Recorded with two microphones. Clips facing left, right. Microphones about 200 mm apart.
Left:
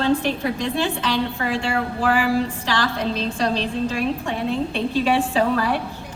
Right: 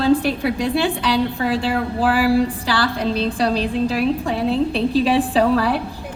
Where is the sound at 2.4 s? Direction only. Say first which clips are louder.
Right 3 dB; 35° right (ahead or behind).